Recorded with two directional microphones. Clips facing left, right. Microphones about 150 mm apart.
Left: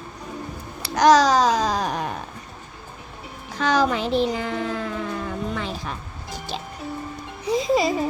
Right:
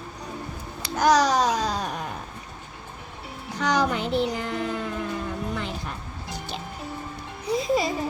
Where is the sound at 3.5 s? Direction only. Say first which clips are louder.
Left 3 dB; 90° left.